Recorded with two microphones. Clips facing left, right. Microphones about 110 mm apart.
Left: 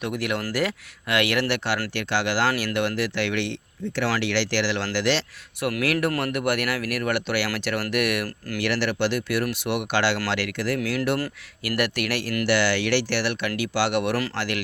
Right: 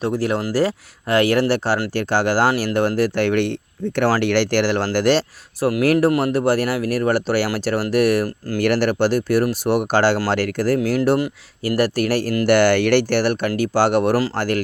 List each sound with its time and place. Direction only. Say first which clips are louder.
0.0 s speech: right 6 dB; 35° right (ahead or behind)
2.5 s speech: right 5 dB; 25° right (ahead or behind)
2.7 s speech: right 7 dB; 40° right (ahead or behind)
8.6 s speech: right 7 dB; 45° right (ahead or behind)
12.5 s speech: right 8 dB; 50° right (ahead or behind)